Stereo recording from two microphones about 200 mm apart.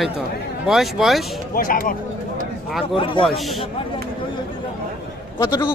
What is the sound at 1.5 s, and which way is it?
Speech, 45° left (ahead or behind).